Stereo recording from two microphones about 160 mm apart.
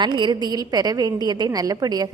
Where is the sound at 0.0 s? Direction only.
30° right (ahead or behind).